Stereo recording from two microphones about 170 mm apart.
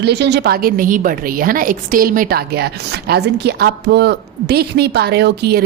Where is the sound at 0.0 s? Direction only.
80° right.